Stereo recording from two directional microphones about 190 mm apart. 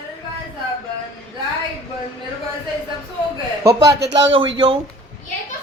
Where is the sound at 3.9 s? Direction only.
65° right (ahead or behind); by 4.6 s 80° right.